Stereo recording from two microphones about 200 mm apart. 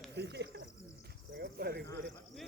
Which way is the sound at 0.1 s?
60° right (ahead or behind).